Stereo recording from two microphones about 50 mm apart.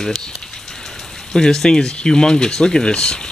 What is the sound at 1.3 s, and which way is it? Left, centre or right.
Speech, centre.